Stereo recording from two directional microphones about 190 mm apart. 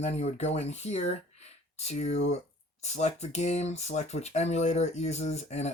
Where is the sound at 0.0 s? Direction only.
35° left (ahead or behind).